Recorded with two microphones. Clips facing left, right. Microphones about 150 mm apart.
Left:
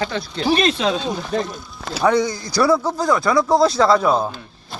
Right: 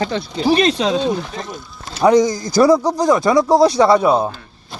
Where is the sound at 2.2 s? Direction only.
45° right (ahead or behind).